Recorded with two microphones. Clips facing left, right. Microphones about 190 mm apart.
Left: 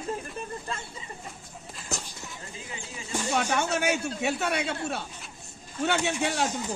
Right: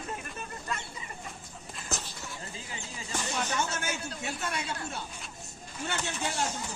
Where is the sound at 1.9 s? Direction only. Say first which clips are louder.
Left 2 dB; centre (ahead or behind).